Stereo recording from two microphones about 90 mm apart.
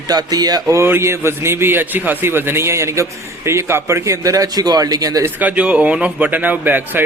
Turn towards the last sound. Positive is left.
turn(degrees=-20)  # may be behind; listen again after turning